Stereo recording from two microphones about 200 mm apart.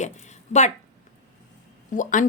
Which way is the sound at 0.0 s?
35° left (ahead or behind).